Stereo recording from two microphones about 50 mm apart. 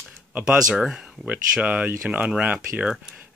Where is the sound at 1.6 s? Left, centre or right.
Right.